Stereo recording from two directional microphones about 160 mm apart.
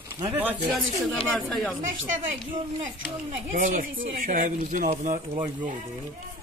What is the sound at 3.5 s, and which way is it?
Speech, 55° right (ahead or behind).